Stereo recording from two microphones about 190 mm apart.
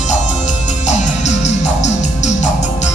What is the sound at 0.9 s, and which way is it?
Music, 35° left (ahead or behind).